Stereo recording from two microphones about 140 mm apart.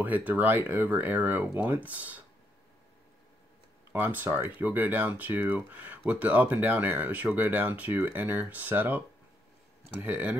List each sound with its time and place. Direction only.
0.0 s speech: 10° right (ahead or behind)
3.9 s speech: 15° right (ahead or behind)